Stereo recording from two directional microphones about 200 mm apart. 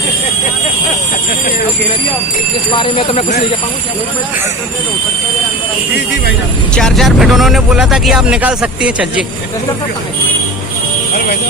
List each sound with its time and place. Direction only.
2.7 s speech: 25° left (ahead or behind)
6.7 s speech: centre (ahead or behind)